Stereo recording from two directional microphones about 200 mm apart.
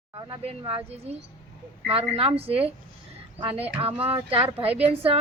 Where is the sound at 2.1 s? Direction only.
30° right (ahead or behind).